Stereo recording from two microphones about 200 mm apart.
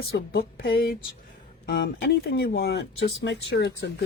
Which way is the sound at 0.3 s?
50° left (ahead or behind).